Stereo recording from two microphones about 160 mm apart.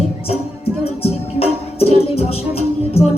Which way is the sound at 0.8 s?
40° left (ahead or behind).